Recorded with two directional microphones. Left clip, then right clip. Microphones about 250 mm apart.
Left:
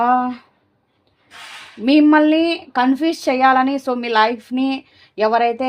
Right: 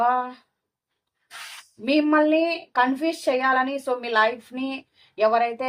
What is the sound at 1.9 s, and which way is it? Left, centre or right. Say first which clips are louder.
A woman's voice: left 7 dB; left.